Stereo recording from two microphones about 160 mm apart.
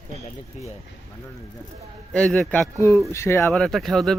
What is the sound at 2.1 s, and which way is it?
Speech, 5° left (ahead or behind).